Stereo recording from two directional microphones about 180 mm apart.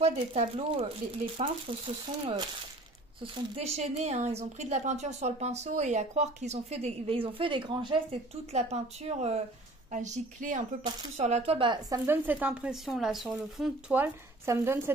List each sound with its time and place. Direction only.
0.0 s a woman's voice: 35° right (ahead or behind)
12.1 s speech: 10° right (ahead or behind)